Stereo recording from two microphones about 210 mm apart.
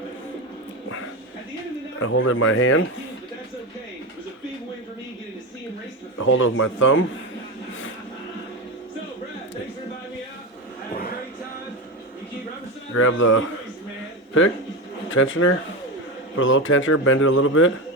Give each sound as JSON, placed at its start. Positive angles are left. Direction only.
{"t": 2.0, "sound": "speech", "side_deg": 70}
{"t": 6.1, "sound": "speech", "side_deg": 65}
{"t": 12.9, "sound": "speech", "side_deg": 70}
{"t": 15.1, "sound": "speech", "side_deg": 70}